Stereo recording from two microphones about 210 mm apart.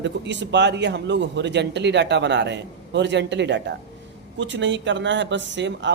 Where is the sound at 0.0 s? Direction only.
60° right (ahead or behind).